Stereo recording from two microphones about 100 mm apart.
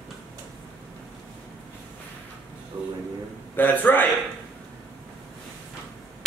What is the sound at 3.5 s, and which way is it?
Speech, 20° left (ahead or behind).